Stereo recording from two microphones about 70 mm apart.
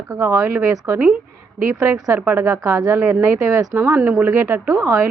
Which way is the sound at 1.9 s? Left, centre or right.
Right.